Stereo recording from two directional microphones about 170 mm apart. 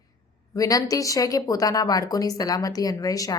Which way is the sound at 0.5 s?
20° left (ahead or behind).